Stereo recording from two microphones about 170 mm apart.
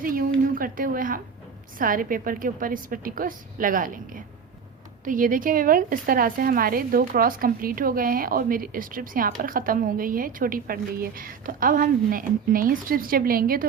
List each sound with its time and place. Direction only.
0.0 s a woman's voice: 60° right (ahead or behind)